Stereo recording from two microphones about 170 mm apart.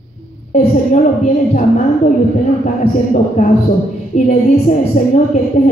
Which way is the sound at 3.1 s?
45° left (ahead or behind).